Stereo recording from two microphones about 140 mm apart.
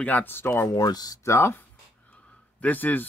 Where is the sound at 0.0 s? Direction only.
10° left (ahead or behind).